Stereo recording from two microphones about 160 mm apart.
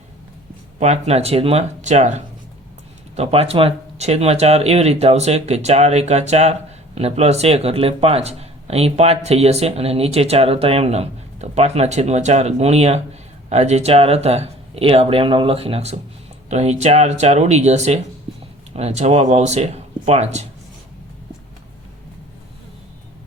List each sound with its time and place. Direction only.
0.8 s speech: 40° right (ahead or behind)